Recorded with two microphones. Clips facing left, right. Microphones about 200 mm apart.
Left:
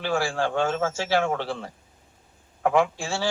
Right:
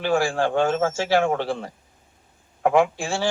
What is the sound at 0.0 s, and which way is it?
Speech, 50° right (ahead or behind).